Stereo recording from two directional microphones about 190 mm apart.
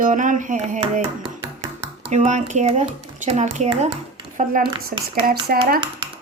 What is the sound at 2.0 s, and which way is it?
Speech, 40° right (ahead or behind).